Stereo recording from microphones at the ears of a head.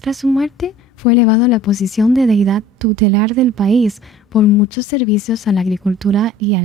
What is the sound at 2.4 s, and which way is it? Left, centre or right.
A woman's voice, right.